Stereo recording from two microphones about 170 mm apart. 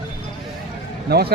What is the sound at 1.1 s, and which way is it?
Speech, 65° right (ahead or behind).